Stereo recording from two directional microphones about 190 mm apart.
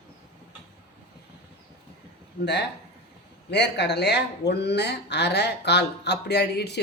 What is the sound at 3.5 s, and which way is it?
Speech, 60° left (ahead or behind).